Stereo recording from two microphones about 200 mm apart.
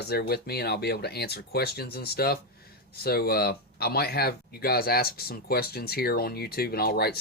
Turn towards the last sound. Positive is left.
turn(degrees=50)  # may be behind; listen again after turning